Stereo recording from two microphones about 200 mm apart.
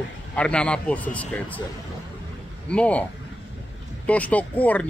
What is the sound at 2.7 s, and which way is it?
Speech, 5° left (ahead or behind).